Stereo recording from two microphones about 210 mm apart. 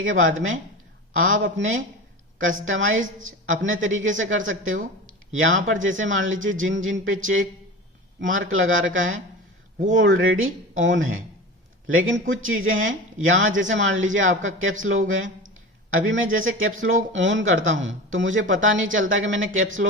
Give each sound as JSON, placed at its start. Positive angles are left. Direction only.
{"t": 0.0, "sound": "speech", "side_deg": -70}
{"t": 2.6, "sound": "speech", "side_deg": -70}